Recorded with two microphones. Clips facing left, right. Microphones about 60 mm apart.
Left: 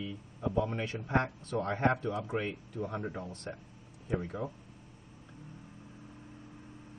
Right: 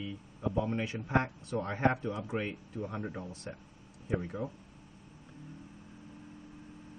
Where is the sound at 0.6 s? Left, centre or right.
Centre.